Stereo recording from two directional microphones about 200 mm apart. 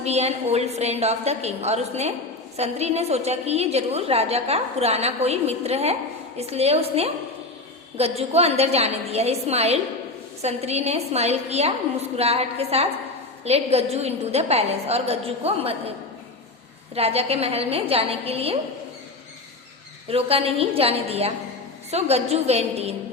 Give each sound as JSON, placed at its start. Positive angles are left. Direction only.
{"t": 0.0, "sound": "a woman's voice", "side_deg": -30}
{"t": 16.9, "sound": "a woman's voice", "side_deg": -30}
{"t": 20.1, "sound": "a woman's voice", "side_deg": -30}